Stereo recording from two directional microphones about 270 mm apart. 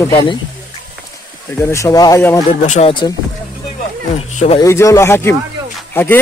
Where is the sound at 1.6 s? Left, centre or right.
Centre.